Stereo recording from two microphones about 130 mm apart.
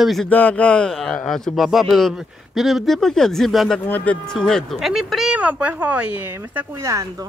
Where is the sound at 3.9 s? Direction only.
10° left (ahead or behind); by 7.2 s 25° right (ahead or behind).